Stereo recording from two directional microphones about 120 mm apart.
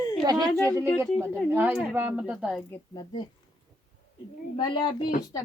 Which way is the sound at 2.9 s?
35° left (ahead or behind).